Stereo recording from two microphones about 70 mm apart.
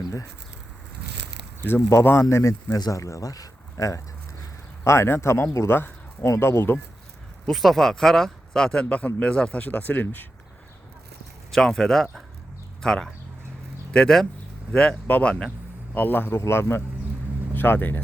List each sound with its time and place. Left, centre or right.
1.6 s speech: left
7.4 s speech: centre; by 10.2 s left
11.5 s speech: centre
14.7 s speech: centre
16.0 s a man's voice: left